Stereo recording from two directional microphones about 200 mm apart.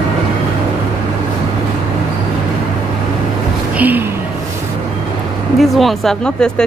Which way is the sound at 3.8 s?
10° right (ahead or behind).